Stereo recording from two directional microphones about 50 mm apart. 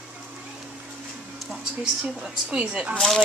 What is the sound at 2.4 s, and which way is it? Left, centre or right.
Speech, right.